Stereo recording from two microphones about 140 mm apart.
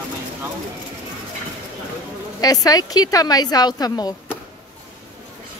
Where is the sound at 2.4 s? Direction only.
25° left (ahead or behind).